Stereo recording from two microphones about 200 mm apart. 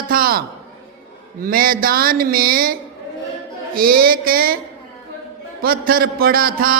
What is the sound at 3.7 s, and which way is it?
Speech, 45° right (ahead or behind).